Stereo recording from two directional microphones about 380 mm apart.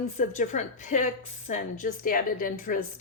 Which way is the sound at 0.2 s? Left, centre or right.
Centre.